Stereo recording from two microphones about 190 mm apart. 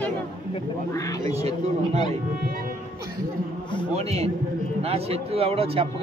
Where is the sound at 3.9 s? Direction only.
35° right (ahead or behind).